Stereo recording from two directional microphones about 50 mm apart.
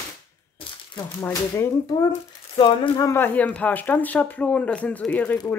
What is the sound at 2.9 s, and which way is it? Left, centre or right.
Speech, left.